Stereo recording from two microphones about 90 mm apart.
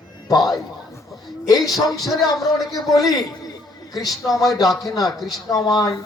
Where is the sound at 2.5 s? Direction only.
Centre (ahead or behind).